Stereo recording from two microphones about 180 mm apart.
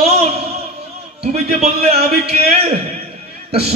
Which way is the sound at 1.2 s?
35° right (ahead or behind).